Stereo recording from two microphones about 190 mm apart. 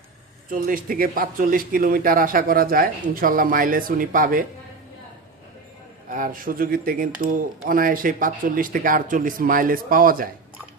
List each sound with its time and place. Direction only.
0.5 s speech: 50° right (ahead or behind)
6.1 s speech: 45° right (ahead or behind)